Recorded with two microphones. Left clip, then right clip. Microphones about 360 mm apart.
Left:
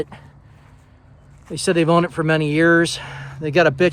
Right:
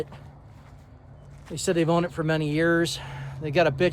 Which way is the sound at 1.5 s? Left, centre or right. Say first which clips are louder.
Left 7 dB; left.